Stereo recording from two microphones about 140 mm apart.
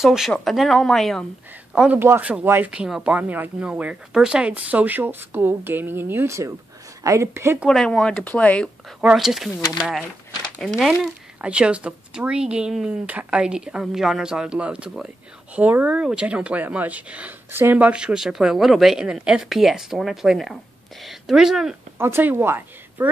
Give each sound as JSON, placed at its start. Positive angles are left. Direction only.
{"t": 0.0, "sound": "speech", "side_deg": -5}
{"t": 2.0, "sound": "a woman's voice", "side_deg": -15}
{"t": 7.6, "sound": "speech", "side_deg": 0}
{"t": 9.0, "sound": "speech", "side_deg": 0}
{"t": 21.9, "sound": "speech", "side_deg": -15}